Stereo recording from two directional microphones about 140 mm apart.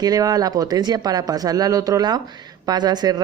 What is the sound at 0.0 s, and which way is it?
Speech, 25° right (ahead or behind).